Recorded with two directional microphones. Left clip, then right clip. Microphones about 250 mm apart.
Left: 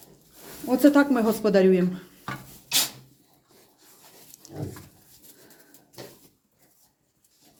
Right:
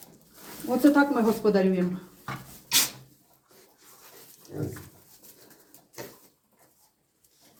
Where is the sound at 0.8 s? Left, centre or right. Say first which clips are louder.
Left 2 dB; left.